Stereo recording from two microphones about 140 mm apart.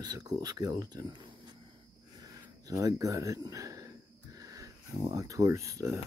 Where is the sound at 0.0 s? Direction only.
30° right (ahead or behind).